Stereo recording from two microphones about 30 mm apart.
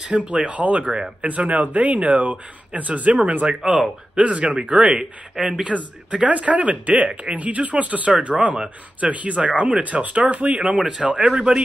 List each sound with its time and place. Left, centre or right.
0.1 s speech: right
9.5 s speech: right
9.9 s speech: right
11.1 s speech: right